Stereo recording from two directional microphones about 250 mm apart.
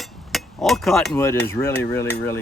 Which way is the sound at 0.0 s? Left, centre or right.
Centre.